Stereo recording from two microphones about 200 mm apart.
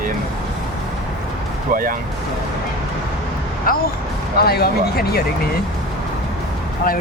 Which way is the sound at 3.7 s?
45° left (ahead or behind).